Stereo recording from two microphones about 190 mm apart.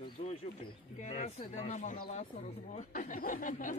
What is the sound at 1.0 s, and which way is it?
Speech, 35° left (ahead or behind).